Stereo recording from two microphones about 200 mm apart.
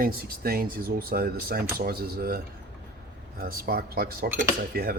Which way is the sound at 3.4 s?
50° right (ahead or behind).